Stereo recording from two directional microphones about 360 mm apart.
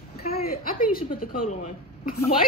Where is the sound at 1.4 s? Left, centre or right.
Left.